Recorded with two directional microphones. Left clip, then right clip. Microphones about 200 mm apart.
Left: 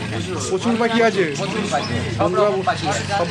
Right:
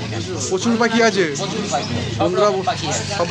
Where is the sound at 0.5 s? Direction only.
5° right (ahead or behind).